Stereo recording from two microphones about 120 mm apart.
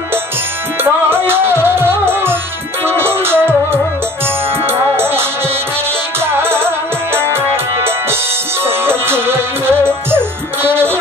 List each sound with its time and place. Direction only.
1.1 s music: 20° right (ahead or behind)
4.9 s music: 20° right (ahead or behind)
6.3 s music: 20° right (ahead or behind)